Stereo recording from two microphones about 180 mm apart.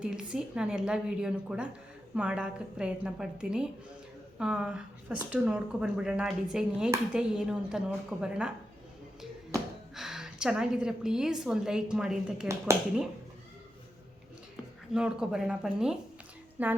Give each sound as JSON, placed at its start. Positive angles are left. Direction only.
{"t": 0.0, "sound": "speech", "side_deg": -5}
{"t": 14.9, "sound": "speech", "side_deg": -5}
{"t": 16.6, "sound": "a sound", "side_deg": -10}